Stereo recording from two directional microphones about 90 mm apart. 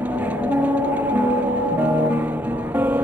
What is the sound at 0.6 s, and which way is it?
Music, 15° right (ahead or behind).